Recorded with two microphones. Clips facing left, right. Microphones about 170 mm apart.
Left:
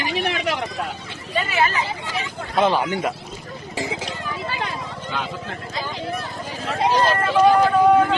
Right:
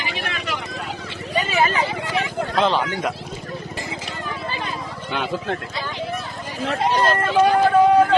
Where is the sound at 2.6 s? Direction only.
10° left (ahead or behind).